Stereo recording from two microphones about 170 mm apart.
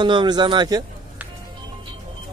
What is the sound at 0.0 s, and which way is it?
Speech, 25° right (ahead or behind).